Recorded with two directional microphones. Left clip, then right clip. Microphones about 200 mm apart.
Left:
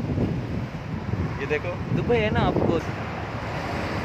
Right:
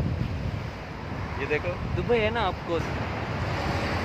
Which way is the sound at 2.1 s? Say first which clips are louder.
Left 1 dB; 20° left (ahead or behind).